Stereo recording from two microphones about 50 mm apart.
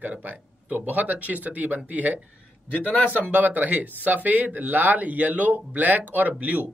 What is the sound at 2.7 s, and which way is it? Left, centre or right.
Speech, left.